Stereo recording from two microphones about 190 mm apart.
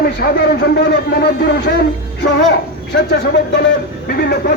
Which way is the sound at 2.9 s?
65° left (ahead or behind).